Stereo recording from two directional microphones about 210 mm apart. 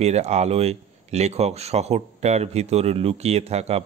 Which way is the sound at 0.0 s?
30° right (ahead or behind).